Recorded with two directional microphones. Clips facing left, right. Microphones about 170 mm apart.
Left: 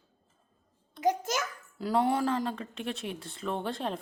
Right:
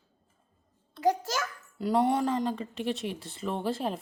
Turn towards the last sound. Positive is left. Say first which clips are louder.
# right 2 dB
turn(degrees=-5)  # may be behind; listen again after turning